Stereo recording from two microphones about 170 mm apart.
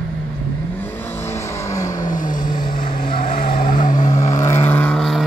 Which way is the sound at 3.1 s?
55° left (ahead or behind).